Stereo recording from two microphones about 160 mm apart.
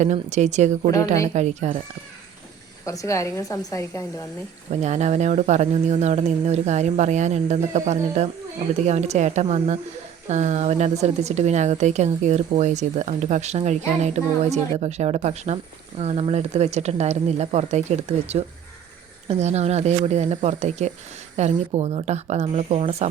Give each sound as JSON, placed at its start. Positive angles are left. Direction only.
{"t": 0.0, "sound": "speech", "side_deg": -45}
{"t": 2.8, "sound": "a woman's voice", "side_deg": 20}
{"t": 4.7, "sound": "speech", "side_deg": -45}